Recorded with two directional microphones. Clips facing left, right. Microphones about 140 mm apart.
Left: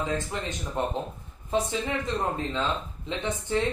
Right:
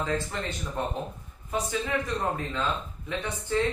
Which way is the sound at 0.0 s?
15° left (ahead or behind).